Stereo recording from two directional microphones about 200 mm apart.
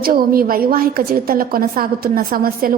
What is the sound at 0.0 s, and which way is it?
A woman's voice, 45° right (ahead or behind).